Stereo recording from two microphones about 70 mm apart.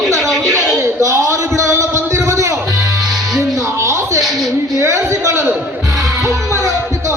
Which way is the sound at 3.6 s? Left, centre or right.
Right.